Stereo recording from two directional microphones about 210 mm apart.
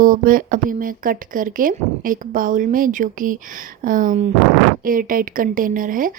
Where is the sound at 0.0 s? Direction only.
40° right (ahead or behind).